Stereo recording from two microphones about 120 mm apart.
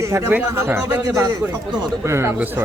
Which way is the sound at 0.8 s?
30° right (ahead or behind).